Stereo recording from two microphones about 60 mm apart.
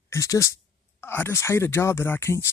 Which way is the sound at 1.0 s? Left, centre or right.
Left.